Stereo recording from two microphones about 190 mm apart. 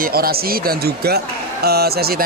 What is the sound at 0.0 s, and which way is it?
A man's voice, 50° right (ahead or behind).